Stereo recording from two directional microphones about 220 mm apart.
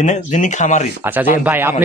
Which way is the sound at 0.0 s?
35° left (ahead or behind).